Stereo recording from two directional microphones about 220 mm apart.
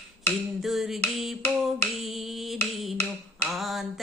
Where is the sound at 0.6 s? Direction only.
Centre (ahead or behind).